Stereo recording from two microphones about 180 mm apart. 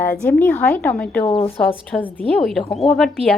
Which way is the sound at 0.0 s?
10° left (ahead or behind).